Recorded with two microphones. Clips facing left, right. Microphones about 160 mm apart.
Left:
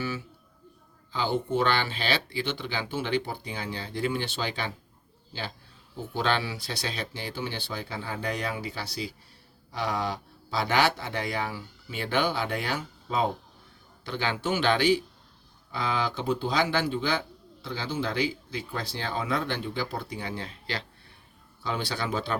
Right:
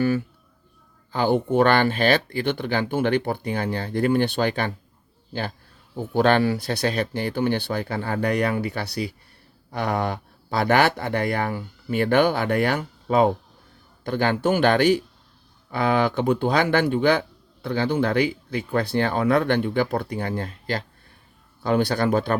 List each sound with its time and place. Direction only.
0.0 s a man's voice: 55° right (ahead or behind)